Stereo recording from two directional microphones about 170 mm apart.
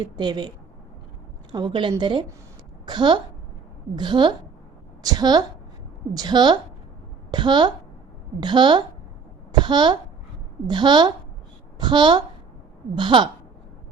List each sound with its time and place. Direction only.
0.0 s a woman's voice: 25° right (ahead or behind)
9.5 s a sound: 25° right (ahead or behind)
10.7 s a woman's voice: 25° right (ahead or behind)